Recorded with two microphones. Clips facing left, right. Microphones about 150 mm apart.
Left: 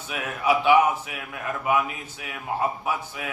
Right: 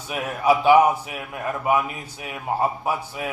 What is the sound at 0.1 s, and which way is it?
Speech, 35° right (ahead or behind).